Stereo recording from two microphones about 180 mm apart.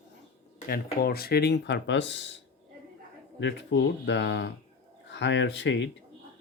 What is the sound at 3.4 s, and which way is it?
Speech, 80° left.